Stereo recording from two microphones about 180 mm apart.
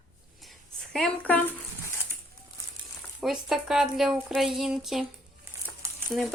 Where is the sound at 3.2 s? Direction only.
Centre (ahead or behind).